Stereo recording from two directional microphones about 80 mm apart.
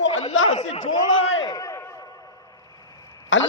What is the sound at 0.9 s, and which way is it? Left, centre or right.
Speech, left.